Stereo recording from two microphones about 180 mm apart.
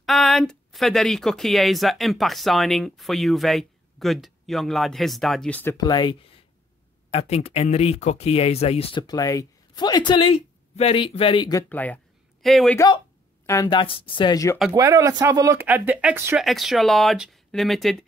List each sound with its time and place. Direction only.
0.0 s a woman's voice: centre (ahead or behind)
5.8 s speech: 25° left (ahead or behind)
11.7 s speech: 10° left (ahead or behind)
12.7 s speech: 20° left (ahead or behind)
14.7 s a woman's voice: 20° right (ahead or behind); by 18.0 s centre (ahead or behind)